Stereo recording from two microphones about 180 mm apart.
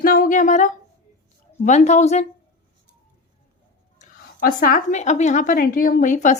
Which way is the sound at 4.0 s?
50° left (ahead or behind).